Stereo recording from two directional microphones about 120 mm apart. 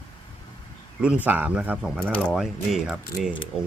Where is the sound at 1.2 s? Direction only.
15° right (ahead or behind).